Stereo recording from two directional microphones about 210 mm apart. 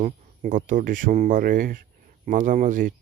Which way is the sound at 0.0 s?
40° right (ahead or behind).